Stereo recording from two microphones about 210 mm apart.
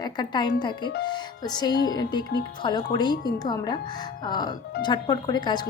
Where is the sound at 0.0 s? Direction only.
20° left (ahead or behind).